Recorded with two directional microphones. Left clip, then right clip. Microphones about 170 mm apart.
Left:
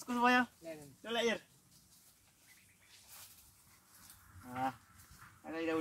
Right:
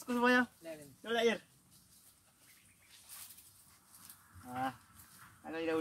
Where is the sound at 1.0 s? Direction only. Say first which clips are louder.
Right 3 dB; 15° right (ahead or behind).